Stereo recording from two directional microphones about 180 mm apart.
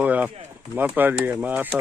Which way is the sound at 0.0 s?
10° right (ahead or behind).